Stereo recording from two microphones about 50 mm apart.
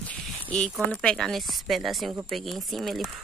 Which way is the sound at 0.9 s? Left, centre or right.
Centre.